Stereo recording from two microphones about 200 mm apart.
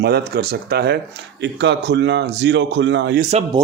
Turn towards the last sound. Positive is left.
turn(degrees=-35)  # may be behind; listen again after turning